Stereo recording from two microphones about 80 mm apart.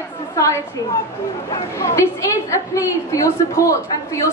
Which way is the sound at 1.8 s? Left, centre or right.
Left.